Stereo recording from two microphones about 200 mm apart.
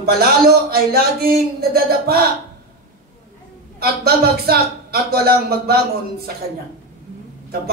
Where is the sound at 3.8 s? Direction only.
50° right (ahead or behind).